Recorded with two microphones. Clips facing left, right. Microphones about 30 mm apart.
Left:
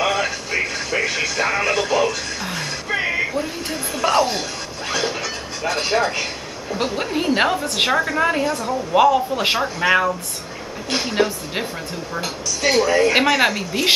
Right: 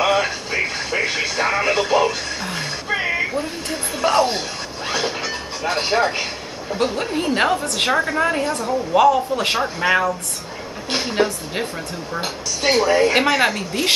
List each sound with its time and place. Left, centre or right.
0.0 s a sound: centre
0.7 s television: right
2.5 s music: centre
3.1 s a sound: centre
3.7 s music: centre
4.2 s a sound: centre
6.8 s a woman's voice: centre
12.2 s speech: right
13.2 s speech: centre